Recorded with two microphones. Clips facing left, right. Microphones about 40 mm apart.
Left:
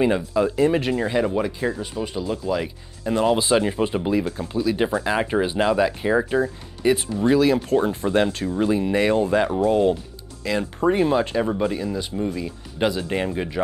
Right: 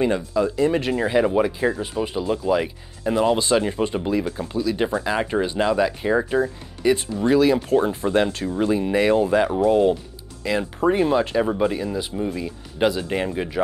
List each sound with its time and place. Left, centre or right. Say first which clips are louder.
0.0 s speech: left 1 dB; centre
0.7 s speech: left 1 dB; centre
1.0 s speech: right 3 dB; centre
3.1 s speech: even; centre